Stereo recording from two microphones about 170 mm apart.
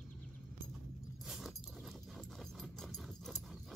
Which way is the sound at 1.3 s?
Centre (ahead or behind).